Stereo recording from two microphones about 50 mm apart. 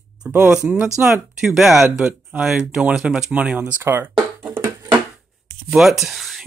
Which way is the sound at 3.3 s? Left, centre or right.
Right.